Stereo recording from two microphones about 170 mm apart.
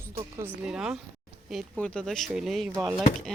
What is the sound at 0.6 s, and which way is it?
Speech, 5° right (ahead or behind).